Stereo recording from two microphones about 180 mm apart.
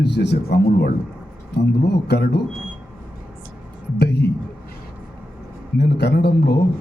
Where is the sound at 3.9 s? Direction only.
65° left (ahead or behind).